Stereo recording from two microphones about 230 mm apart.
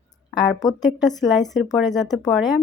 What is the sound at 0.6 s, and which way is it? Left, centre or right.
Speech, centre.